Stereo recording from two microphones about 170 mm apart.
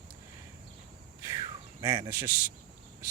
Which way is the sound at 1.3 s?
25° right (ahead or behind).